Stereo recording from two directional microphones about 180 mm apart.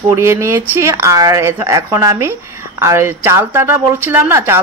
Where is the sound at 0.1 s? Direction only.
15° right (ahead or behind).